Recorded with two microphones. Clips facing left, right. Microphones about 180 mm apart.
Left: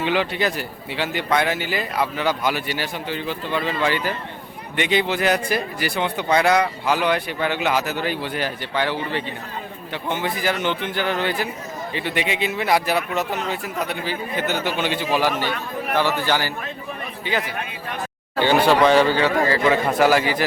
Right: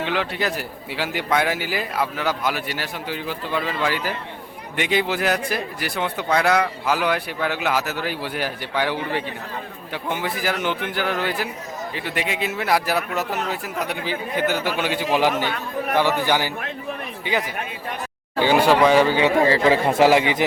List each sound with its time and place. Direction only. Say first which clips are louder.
0.0 s speech: left 3 dB; centre (ahead or behind); by 16.5 s 15° right (ahead or behind)
18.3 s speech: even; 10° right (ahead or behind)
19.2 s speech: right 2 dB; 25° right (ahead or behind)